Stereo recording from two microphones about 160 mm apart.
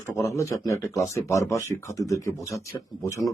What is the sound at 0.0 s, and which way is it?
Speech, 20° left (ahead or behind).